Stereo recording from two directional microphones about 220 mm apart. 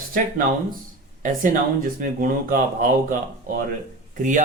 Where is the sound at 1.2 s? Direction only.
35° right (ahead or behind).